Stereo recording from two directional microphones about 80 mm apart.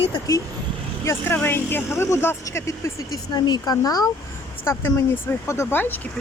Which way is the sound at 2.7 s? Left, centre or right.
Left.